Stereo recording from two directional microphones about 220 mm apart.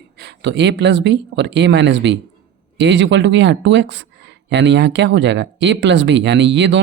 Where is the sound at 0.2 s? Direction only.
50° right (ahead or behind).